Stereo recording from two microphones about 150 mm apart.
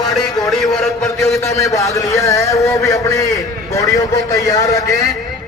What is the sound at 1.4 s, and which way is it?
A man's voice, 20° left (ahead or behind).